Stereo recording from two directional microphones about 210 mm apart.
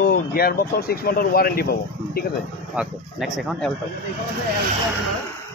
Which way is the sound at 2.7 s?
5° right (ahead or behind).